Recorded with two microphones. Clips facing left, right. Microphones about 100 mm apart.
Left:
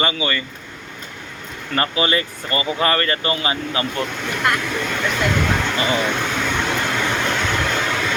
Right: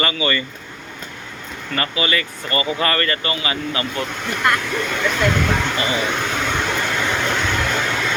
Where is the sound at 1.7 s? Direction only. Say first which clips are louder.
Left 2 dB; 30° left (ahead or behind).